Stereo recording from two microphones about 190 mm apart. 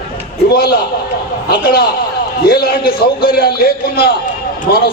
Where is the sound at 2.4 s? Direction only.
55° left (ahead or behind).